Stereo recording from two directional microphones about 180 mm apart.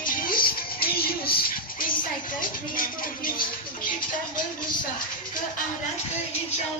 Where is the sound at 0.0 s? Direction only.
50° left (ahead or behind).